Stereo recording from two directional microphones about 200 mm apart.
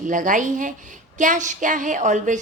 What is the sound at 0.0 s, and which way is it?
A woman's voice, 40° right (ahead or behind).